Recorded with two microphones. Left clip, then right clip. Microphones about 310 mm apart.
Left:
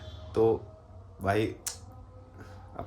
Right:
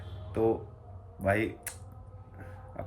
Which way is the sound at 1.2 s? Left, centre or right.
Centre.